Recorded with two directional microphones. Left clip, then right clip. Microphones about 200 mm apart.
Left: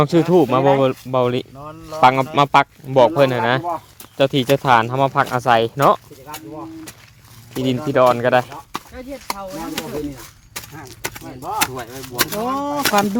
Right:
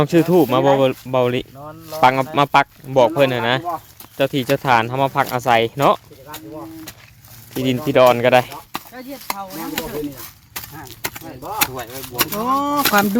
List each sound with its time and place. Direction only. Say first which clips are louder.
0.0 s speech: even; centre (ahead or behind)
7.5 s speech: even; 5° right (ahead or behind)
7.9 s speech: right 2 dB; 15° right (ahead or behind)
8.9 s speech: left 1 dB; 35° right (ahead or behind)
9.8 s speech: right 1 dB; 10° right (ahead or behind)
12.1 s speech: left 1 dB; centre (ahead or behind)
12.5 s speech: right 4 dB; 50° right (ahead or behind)